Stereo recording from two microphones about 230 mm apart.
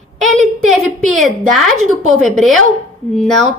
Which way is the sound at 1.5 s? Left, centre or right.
Centre.